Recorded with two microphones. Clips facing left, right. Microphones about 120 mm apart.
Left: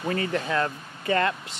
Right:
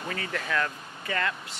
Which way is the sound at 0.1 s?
30° left (ahead or behind).